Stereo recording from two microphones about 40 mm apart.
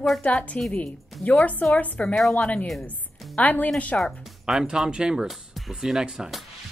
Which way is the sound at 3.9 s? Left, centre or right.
Left.